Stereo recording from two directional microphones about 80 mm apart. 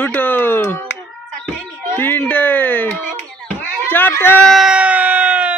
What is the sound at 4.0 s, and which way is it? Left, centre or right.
Speech, left.